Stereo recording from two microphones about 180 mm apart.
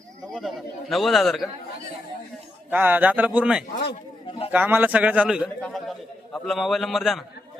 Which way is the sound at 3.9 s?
30° left (ahead or behind).